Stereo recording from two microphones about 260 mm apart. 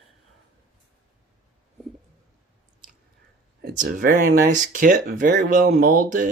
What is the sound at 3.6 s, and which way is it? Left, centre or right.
Speech, right.